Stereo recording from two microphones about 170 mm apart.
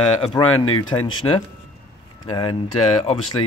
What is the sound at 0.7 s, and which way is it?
Speech, 25° left (ahead or behind).